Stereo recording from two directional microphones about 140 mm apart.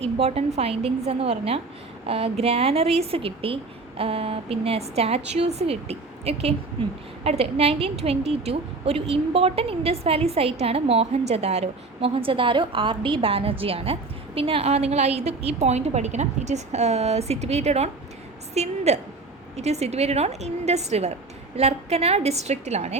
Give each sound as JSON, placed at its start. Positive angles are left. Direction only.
{"t": 0.0, "sound": "a woman's voice", "side_deg": -45}